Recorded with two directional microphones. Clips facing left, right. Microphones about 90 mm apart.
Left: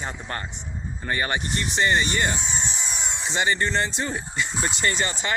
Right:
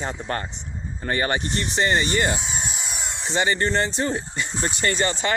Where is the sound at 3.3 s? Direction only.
45° right (ahead or behind).